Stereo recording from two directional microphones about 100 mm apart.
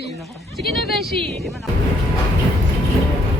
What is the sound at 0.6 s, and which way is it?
Speech, centre (ahead or behind).